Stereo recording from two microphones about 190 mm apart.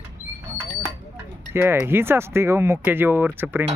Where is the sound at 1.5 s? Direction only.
10° right (ahead or behind).